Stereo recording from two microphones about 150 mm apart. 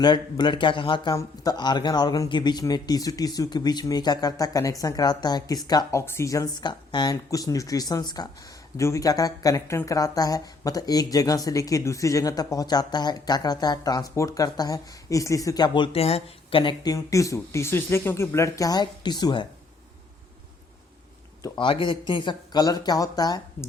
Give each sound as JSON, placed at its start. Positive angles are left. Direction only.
{"t": 0.0, "sound": "speech", "side_deg": 30}
{"t": 21.4, "sound": "speech", "side_deg": 30}